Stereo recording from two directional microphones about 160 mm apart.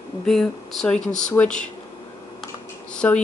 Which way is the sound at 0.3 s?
Centre (ahead or behind).